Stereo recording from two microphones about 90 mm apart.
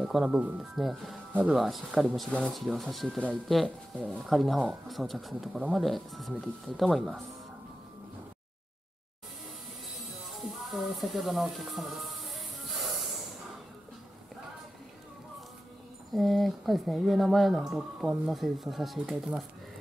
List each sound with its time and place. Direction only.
0.0 s speech: 5° right (ahead or behind)
0.4 s speech: 15° right (ahead or behind)
0.7 s speech: centre (ahead or behind)
2.2 s speech: 10° left (ahead or behind)
2.5 s speech: centre (ahead or behind)
9.8 s music: centre (ahead or behind)
16.1 s speech: centre (ahead or behind)